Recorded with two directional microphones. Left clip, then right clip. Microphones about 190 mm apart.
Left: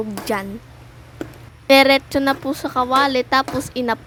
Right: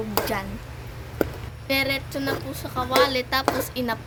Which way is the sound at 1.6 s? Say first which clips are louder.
Left 12 dB; 50° left (ahead or behind).